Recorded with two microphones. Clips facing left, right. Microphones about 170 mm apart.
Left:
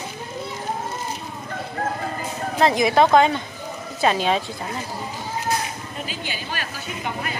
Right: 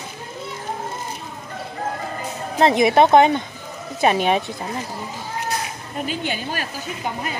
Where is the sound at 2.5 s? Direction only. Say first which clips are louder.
Right 3 dB; 25° right (ahead or behind).